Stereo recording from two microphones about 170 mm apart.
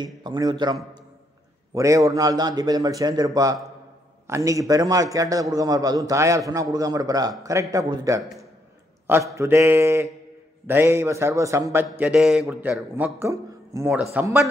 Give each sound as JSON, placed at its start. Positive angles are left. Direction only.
{"t": 0.0, "sound": "a man's voice", "side_deg": -25}